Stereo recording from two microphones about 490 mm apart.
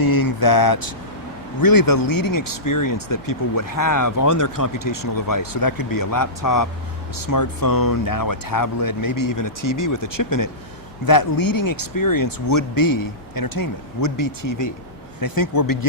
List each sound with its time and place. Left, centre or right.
0.0 s vehicle: left
1.6 s speech: left